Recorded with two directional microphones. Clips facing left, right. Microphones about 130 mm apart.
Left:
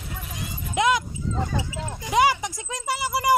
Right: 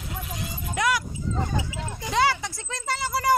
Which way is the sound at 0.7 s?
20° left (ahead or behind).